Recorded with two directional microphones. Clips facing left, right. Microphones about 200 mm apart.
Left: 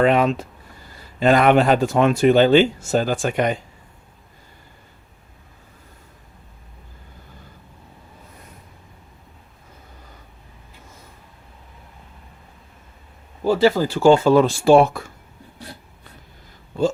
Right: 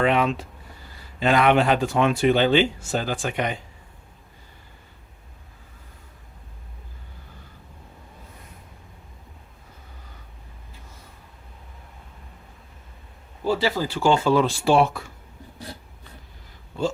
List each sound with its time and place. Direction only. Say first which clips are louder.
0.0 s speech: left 4 dB; 40° left (ahead or behind)
13.4 s speech: left 6 dB; 50° left (ahead or behind)